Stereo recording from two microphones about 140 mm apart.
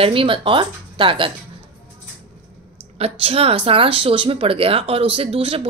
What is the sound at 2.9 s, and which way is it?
A woman's voice, 45° right (ahead or behind).